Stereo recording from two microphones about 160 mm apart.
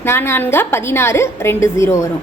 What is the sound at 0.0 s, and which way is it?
A woman's voice, 15° left (ahead or behind).